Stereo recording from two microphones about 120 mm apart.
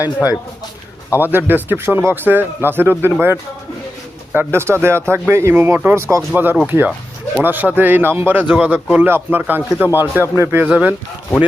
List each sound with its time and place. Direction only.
1.2 s speech: 15° right (ahead or behind)
4.4 s speech: 20° right (ahead or behind)
10.7 s speech: 10° right (ahead or behind)